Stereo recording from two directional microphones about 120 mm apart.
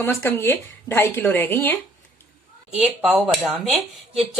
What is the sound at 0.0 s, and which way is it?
Speech, 20° left (ahead or behind).